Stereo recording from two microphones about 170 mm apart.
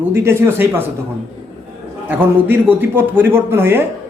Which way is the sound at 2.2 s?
10° right (ahead or behind).